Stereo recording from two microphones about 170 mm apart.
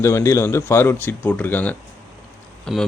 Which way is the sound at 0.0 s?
15° left (ahead or behind).